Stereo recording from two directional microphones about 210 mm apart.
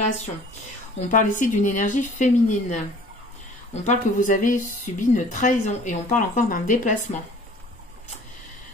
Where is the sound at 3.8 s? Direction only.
40° left (ahead or behind).